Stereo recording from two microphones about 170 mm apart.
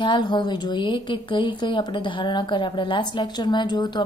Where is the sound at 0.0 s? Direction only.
25° left (ahead or behind).